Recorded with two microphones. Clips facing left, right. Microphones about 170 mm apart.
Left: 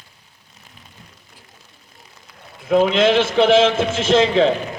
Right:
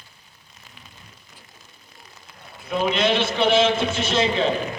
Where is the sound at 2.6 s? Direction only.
90° left.